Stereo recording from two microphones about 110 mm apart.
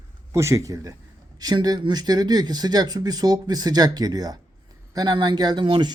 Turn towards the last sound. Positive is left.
turn(degrees=-45)  # may be behind; listen again after turning